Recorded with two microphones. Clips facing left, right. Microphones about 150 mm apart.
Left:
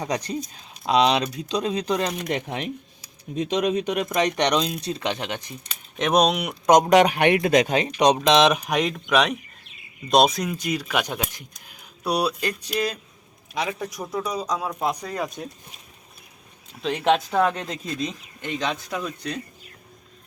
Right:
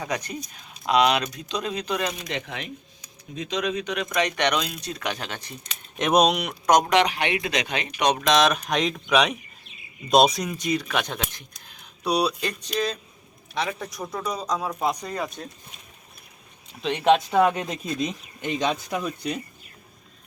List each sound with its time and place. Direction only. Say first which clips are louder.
0.0 s speech: left 3 dB; 35° left (ahead or behind)
2.1 s speech: left 5 dB; 50° left (ahead or behind)
4.0 s speech: right 1 dB; 35° left (ahead or behind); by 5.5 s 15° left (ahead or behind)
5.6 s speech: even; centre (ahead or behind)
6.9 s speech: left 5 dB; 45° left (ahead or behind)
8.1 s a man's voice: even; 20° left (ahead or behind); by 15.4 s centre (ahead or behind)
16.8 s speech: right 1 dB; centre (ahead or behind)